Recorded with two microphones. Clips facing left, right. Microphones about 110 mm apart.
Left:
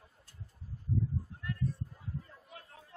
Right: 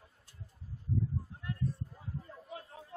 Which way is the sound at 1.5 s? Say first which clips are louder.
Even; 25° right (ahead or behind).